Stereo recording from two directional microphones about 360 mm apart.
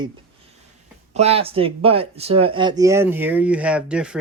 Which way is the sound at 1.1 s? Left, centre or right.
Centre.